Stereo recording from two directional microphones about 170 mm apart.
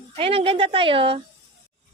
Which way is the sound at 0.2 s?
35° right (ahead or behind).